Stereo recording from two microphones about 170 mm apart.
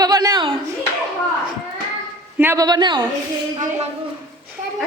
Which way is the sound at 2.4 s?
15° right (ahead or behind).